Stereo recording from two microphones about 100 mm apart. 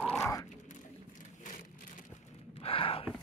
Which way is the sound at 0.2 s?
35° left (ahead or behind).